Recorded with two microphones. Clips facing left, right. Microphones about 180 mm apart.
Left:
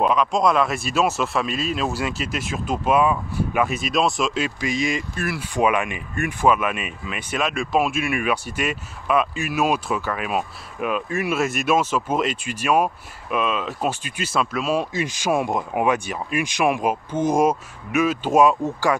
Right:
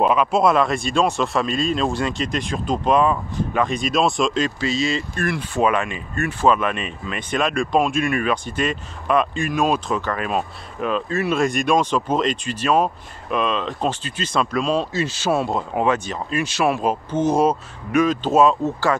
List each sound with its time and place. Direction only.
0.0 s speech: 5° right (ahead or behind); by 19.1 s 15° left (ahead or behind)